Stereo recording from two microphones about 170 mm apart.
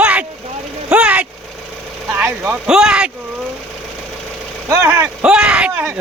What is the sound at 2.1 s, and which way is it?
Speech, 10° right (ahead or behind).